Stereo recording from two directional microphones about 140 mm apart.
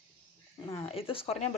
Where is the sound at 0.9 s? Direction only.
40° left (ahead or behind).